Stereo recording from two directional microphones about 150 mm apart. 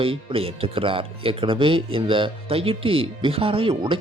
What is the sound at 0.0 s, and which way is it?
Speech, 40° right (ahead or behind).